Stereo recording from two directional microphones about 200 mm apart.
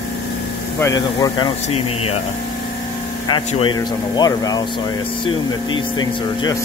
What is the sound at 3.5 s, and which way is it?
Speech, 25° left (ahead or behind).